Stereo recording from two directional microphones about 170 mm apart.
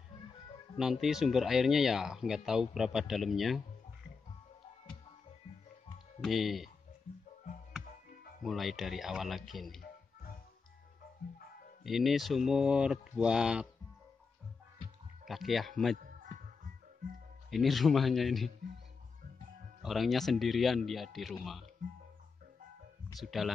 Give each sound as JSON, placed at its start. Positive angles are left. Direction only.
{"t": 0.7, "sound": "speech", "side_deg": 0}
{"t": 6.2, "sound": "speech", "side_deg": 0}
{"t": 8.5, "sound": "speech", "side_deg": 0}
{"t": 11.8, "sound": "speech", "side_deg": 0}
{"t": 15.2, "sound": "speech", "side_deg": 0}
{"t": 16.0, "sound": "music", "side_deg": -50}
{"t": 17.5, "sound": "speech", "side_deg": 0}
{"t": 19.8, "sound": "speech", "side_deg": 0}
{"t": 23.1, "sound": "speech", "side_deg": 0}